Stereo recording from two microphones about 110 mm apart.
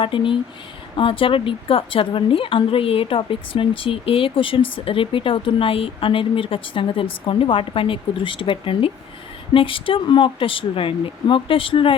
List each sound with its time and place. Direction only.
0.0 s a woman's voice: 50° left (ahead or behind)